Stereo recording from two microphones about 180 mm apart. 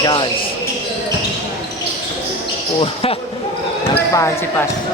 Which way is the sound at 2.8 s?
30° left (ahead or behind).